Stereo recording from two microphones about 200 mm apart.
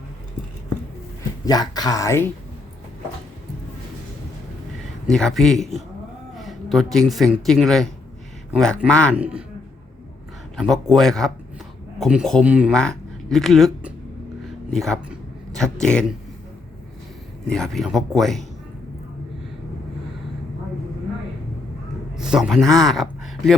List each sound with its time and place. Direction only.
1.5 s speech: 20° left (ahead or behind)
5.1 s speech: centre (ahead or behind)
9.1 s speech: 5° right (ahead or behind)
10.6 s speech: centre (ahead or behind)
14.7 s a sound: centre (ahead or behind)
17.5 s speech: centre (ahead or behind)
22.1 s a man's voice: 5° right (ahead or behind)